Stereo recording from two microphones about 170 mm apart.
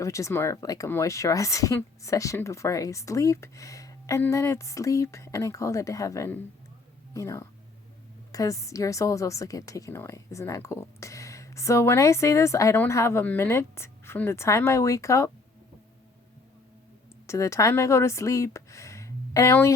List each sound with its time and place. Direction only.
0.0 s a woman's voice: 20° left (ahead or behind)
17.2 s speech: 15° left (ahead or behind)